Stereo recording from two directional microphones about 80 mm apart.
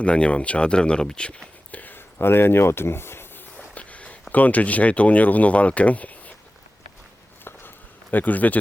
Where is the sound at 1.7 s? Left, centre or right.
Left.